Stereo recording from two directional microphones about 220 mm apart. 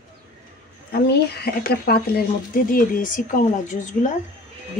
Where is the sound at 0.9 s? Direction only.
45° left (ahead or behind).